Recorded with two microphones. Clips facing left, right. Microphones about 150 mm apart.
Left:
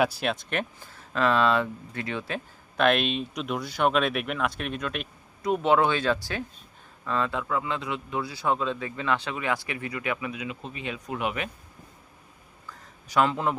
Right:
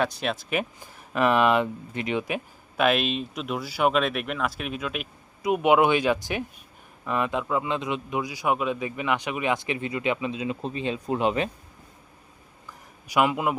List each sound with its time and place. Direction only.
0.0 s speech: 5° left (ahead or behind)
0.8 s a man's voice: 15° right (ahead or behind)
12.6 s a sound: 10° right (ahead or behind)